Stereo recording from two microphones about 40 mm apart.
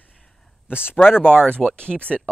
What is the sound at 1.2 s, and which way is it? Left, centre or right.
Speech, left.